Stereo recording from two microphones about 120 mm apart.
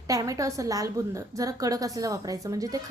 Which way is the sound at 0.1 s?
30° right (ahead or behind).